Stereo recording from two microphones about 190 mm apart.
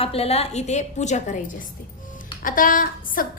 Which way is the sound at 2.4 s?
45° left (ahead or behind).